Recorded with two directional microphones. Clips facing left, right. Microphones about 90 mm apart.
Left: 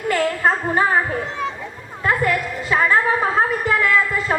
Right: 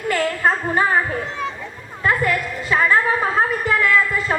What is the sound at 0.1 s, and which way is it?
Children playing, 20° left (ahead or behind).